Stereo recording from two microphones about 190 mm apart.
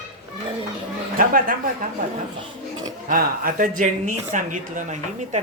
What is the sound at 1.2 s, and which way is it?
Speech, 50° right (ahead or behind).